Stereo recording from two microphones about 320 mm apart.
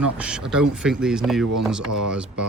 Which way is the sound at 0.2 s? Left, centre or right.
Centre.